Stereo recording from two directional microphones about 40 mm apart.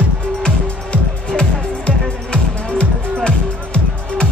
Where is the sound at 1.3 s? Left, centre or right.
Left.